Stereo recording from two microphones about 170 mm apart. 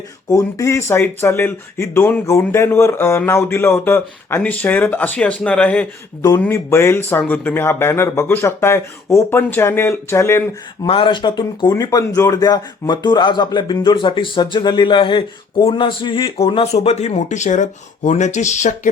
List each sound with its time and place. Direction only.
0.3 s speech: 20° left (ahead or behind)
10.8 s speech: 30° left (ahead or behind)